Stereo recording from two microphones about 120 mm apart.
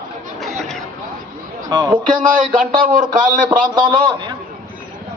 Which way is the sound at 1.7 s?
35° right (ahead or behind).